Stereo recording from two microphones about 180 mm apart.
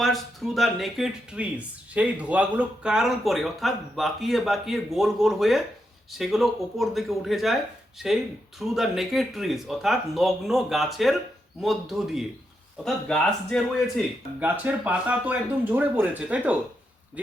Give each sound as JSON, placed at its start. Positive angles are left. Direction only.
{"t": 0.0, "sound": "speech", "side_deg": 0}
{"t": 14.3, "sound": "speech", "side_deg": -10}